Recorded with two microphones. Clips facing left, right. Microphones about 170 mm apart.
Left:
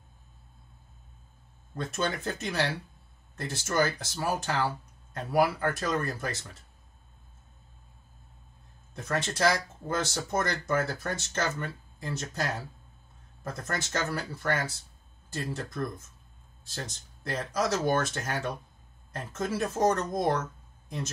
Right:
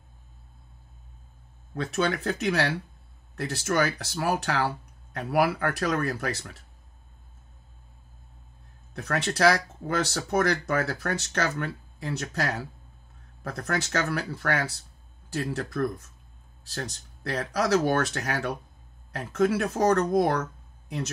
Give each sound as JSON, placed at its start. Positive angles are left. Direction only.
{"t": 1.8, "sound": "speech", "side_deg": -70}
{"t": 8.9, "sound": "speech", "side_deg": -70}